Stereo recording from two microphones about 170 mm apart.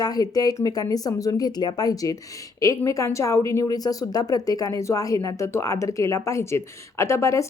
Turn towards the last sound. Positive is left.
turn(degrees=15)  # may be behind; listen again after turning